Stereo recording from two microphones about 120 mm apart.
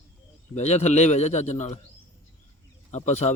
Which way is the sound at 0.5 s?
65° left (ahead or behind).